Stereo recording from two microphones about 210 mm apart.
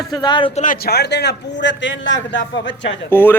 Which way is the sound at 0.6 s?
45° left (ahead or behind).